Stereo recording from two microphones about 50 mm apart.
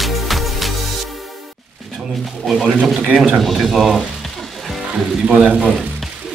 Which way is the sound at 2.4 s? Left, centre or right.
Centre.